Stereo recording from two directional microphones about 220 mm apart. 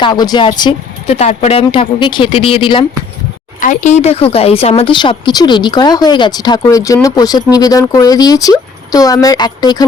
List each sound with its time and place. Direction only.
0.0 s speech: 20° left (ahead or behind)
3.6 s speech: 35° left (ahead or behind); by 9.8 s 20° left (ahead or behind)